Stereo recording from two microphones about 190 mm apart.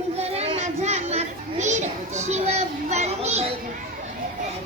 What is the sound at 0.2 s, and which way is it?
Children playing, 30° right (ahead or behind).